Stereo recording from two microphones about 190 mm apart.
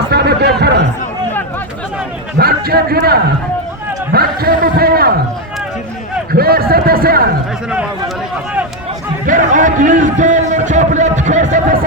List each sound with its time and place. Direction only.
0.1 s chatter: 60° right (ahead or behind)
2.4 s a man's voice: 55° right (ahead or behind)
4.1 s a sound: 55° right (ahead or behind)
6.3 s a man's voice: 55° right (ahead or behind)
7.7 s a man's voice: 5° right (ahead or behind)
9.2 s speech: 45° right (ahead or behind)